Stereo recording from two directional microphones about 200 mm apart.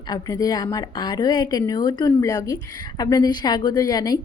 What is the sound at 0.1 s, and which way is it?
A woman's voice, 20° left (ahead or behind).